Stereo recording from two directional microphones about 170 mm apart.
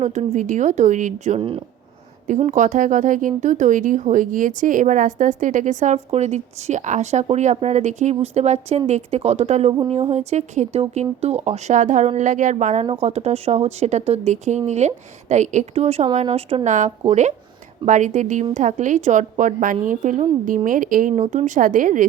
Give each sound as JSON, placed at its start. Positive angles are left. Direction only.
{"t": 0.0, "sound": "speech", "side_deg": -45}
{"t": 2.4, "sound": "speech", "side_deg": -45}
{"t": 12.8, "sound": "speech", "side_deg": -35}